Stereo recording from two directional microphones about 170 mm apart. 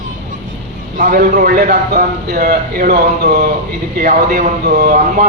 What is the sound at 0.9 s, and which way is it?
A man's voice, 55° right (ahead or behind).